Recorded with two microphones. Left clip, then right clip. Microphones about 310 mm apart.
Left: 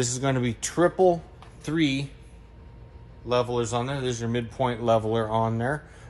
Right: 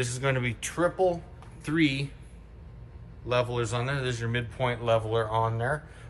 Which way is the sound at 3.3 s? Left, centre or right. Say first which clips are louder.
Left 3 dB; centre.